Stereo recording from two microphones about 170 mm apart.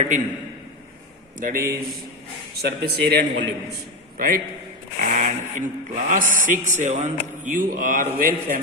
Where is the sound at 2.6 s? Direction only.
80° right.